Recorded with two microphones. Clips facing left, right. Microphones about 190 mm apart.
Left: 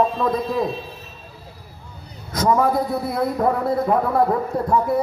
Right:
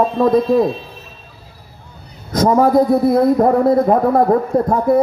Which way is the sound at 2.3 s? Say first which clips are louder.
Right 6 dB; 40° right (ahead or behind).